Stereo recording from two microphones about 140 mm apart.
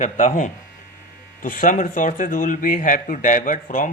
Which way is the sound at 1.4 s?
75° left (ahead or behind).